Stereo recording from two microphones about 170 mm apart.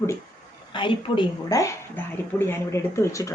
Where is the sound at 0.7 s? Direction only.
30° left (ahead or behind).